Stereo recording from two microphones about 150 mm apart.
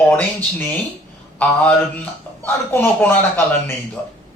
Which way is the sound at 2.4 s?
15° left (ahead or behind).